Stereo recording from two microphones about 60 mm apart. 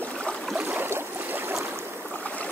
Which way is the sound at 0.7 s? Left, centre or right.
Right.